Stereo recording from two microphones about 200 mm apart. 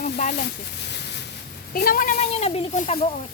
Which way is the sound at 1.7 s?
45° left (ahead or behind).